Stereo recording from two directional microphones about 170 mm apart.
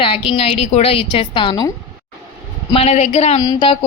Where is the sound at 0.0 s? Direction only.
30° left (ahead or behind).